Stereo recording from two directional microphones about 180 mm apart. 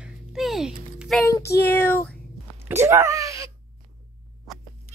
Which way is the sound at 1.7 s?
10° left (ahead or behind).